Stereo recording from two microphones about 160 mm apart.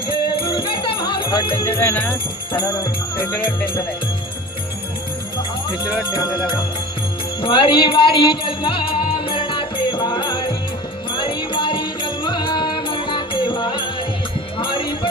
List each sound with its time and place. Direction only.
0.1 s music: 35° left (ahead or behind)
1.8 s speech: 10° left (ahead or behind)
6.1 s music: 25° left (ahead or behind)